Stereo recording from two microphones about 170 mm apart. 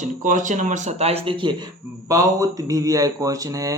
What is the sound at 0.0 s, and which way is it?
Speech, 50° right (ahead or behind).